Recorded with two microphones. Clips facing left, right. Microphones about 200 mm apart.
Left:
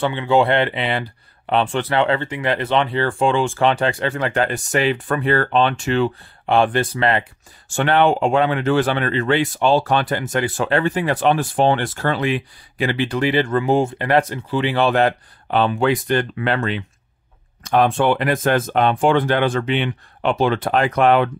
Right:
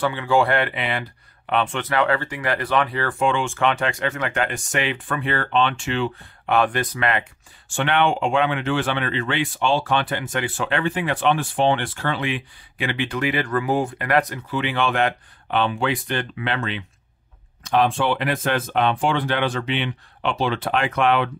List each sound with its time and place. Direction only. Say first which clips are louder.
0.0 s speech: left 3 dB; 25° left (ahead or behind); by 21.3 s 45° left (ahead or behind)